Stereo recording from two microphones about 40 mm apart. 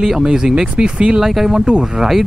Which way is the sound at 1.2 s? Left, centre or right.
Centre.